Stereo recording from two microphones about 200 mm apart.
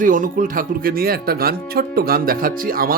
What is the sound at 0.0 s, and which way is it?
Speech, 40° right (ahead or behind).